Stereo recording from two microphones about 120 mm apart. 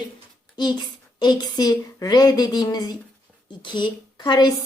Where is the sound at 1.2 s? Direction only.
35° left (ahead or behind).